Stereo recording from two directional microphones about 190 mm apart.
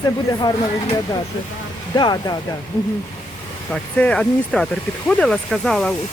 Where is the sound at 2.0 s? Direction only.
20° left (ahead or behind).